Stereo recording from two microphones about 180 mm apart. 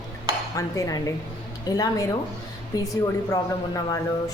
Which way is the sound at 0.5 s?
20° left (ahead or behind).